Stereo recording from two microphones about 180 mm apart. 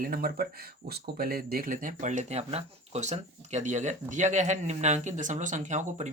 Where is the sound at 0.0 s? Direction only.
55° right (ahead or behind).